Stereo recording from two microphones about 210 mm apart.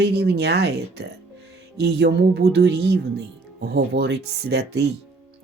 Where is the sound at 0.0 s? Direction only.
50° right (ahead or behind).